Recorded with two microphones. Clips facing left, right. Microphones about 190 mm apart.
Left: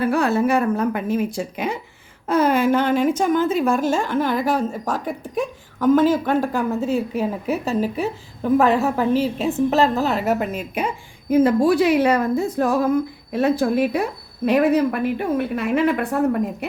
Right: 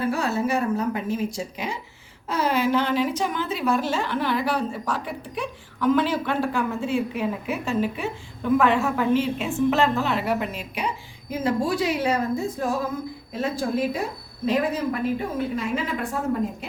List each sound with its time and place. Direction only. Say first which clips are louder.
0.1 s a woman's voice: left 6 dB; 55° left (ahead or behind)